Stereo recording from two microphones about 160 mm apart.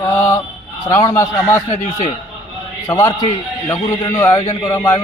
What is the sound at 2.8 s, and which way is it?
A man's voice, 20° left (ahead or behind).